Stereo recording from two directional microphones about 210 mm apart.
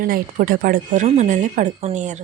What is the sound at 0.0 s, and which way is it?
A woman's voice, 45° right (ahead or behind).